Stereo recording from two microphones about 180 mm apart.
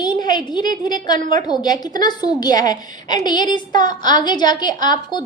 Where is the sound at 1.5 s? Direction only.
20° left (ahead or behind).